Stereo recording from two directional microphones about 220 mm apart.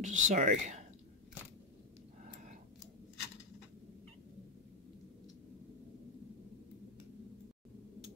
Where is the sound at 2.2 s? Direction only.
35° right (ahead or behind).